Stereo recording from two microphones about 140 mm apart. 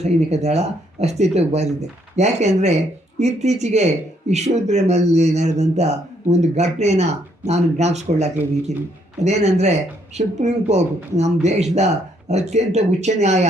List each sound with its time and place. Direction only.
0.0 s speech: 50° right (ahead or behind)